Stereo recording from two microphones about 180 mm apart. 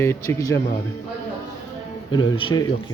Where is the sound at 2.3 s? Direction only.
30° left (ahead or behind).